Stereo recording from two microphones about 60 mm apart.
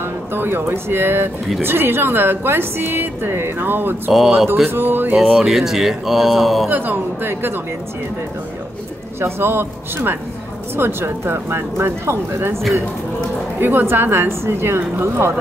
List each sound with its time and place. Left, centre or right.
0.3 s a woman's voice: right
4.1 s speech: centre
4.6 s a woman's voice: right
5.1 s speech: centre
5.4 s speech: centre
6.7 s a woman's voice: right
9.2 s a woman's voice: right
13.6 s a woman's voice: right